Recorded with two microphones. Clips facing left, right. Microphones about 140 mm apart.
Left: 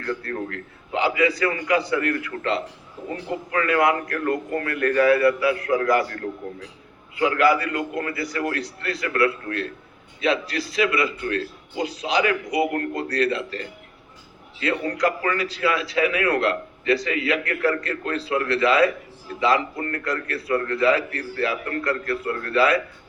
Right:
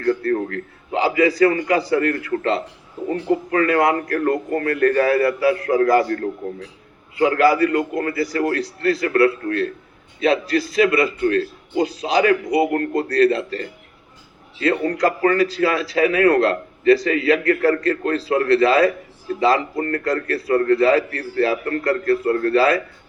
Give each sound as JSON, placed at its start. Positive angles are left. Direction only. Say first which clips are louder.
{"t": 0.0, "sound": "speech", "louder": "right 9 dB", "side_deg": -40}
{"t": 7.2, "sound": "speech", "louder": "right 4 dB", "side_deg": -35}